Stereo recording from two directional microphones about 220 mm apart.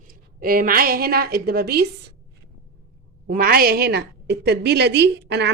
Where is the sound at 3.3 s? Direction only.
45° right (ahead or behind).